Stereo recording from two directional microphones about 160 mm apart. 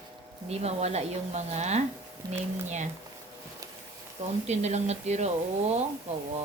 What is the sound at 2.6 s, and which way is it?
Speech, 45° right (ahead or behind).